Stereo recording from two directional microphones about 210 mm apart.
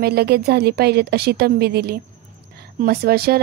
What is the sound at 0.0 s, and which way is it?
Speech, 50° right (ahead or behind).